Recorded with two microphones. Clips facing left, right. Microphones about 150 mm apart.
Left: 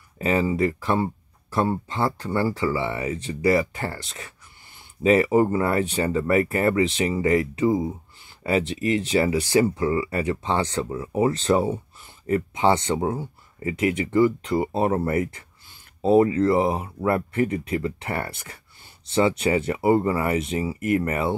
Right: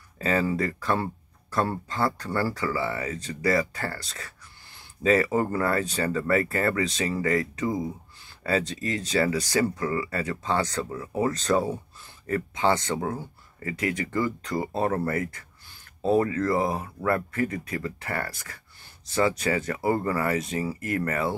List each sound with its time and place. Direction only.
0.2 s speech: 20° left (ahead or behind)
5.0 s speech: 20° left (ahead or behind)